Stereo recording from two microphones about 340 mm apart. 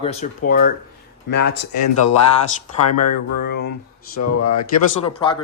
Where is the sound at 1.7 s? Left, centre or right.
Left.